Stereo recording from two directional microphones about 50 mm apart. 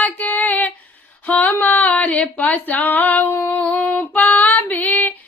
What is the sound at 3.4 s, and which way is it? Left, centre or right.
Female singing, left.